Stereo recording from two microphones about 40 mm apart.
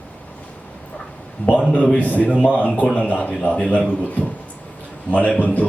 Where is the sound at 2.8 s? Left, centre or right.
Left.